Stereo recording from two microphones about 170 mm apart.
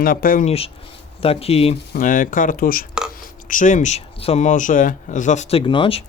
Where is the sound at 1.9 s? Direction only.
50° left (ahead or behind); by 6.0 s 30° left (ahead or behind).